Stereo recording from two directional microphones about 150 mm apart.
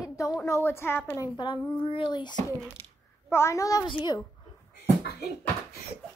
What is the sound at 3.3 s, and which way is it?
Speech, 20° left (ahead or behind).